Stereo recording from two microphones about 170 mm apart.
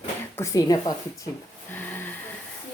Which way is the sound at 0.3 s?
20° left (ahead or behind).